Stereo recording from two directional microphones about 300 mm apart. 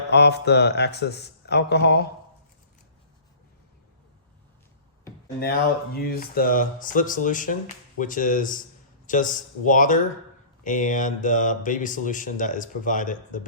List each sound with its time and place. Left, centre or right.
0.1 s a man's voice: left
5.4 s speech: left